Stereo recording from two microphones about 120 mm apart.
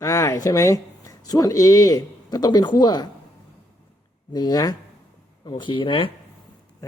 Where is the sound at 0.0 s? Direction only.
25° left (ahead or behind).